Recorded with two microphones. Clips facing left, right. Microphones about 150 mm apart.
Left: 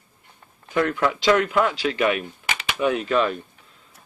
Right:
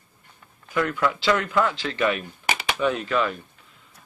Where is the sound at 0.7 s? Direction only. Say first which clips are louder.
Left 2 dB; 25° left (ahead or behind).